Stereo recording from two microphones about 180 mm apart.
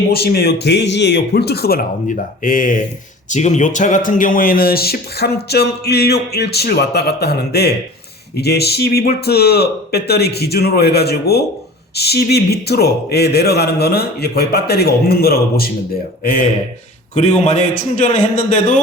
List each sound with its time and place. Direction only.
0.1 s speech: 60° left (ahead or behind)
17.2 s a man's voice: 40° left (ahead or behind)